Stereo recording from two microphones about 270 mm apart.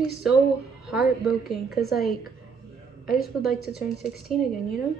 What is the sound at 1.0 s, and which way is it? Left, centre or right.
Speech, left.